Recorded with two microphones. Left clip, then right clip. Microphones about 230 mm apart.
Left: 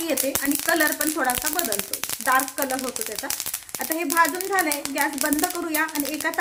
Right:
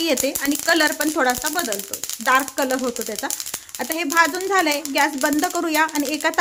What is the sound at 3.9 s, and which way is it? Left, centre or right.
Speech, right.